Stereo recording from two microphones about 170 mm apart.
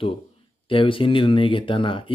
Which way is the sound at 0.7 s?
30° left (ahead or behind).